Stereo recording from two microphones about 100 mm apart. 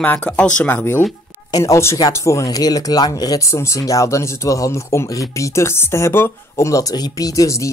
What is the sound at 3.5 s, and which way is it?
Speech, 30° left (ahead or behind).